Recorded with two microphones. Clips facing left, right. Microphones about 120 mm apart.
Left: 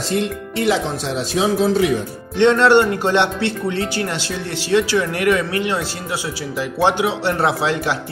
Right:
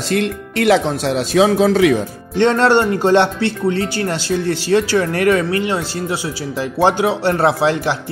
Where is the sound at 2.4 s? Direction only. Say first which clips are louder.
Even; 40° right (ahead or behind).